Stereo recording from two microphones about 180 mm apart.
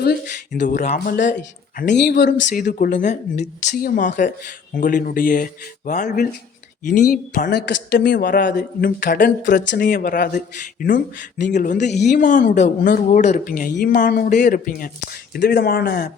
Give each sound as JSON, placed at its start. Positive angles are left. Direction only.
{"t": 0.0, "sound": "speech", "side_deg": 65}
{"t": 0.6, "sound": "speech", "side_deg": 45}
{"t": 3.8, "sound": "speech", "side_deg": 50}
{"t": 7.0, "sound": "speech", "side_deg": 60}
{"t": 8.0, "sound": "speech", "side_deg": 50}
{"t": 8.5, "sound": "speech", "side_deg": 60}
{"t": 15.3, "sound": "speech", "side_deg": 65}